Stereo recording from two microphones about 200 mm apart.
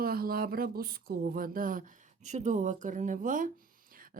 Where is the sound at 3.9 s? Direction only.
45° right (ahead or behind).